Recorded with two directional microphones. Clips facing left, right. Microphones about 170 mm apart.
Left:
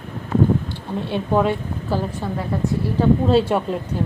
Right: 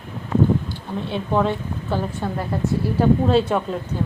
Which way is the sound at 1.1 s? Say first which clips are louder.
Left 2 dB; 10° left (ahead or behind).